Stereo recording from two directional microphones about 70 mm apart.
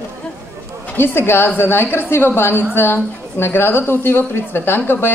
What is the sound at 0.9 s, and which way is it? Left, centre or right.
A woman's voice, left.